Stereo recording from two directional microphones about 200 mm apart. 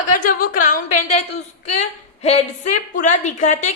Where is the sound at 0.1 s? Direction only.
45° left (ahead or behind).